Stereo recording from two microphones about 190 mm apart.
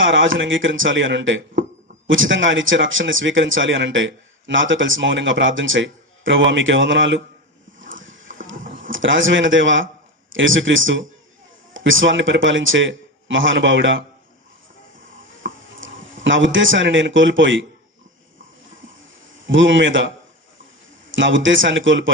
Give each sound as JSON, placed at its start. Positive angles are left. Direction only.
{"t": 0.0, "sound": "a man's voice", "side_deg": -90}
{"t": 2.0, "sound": "a man's voice", "side_deg": -90}
{"t": 7.8, "sound": "a sound", "side_deg": -90}
{"t": 8.6, "sound": "a sound", "side_deg": -45}
{"t": 8.9, "sound": "a man's voice", "side_deg": -90}
{"t": 15.4, "sound": "a sound", "side_deg": -50}
{"t": 15.8, "sound": "speech", "side_deg": -85}
{"t": 19.5, "sound": "a man's voice", "side_deg": -80}
{"t": 21.1, "sound": "a man's voice", "side_deg": -80}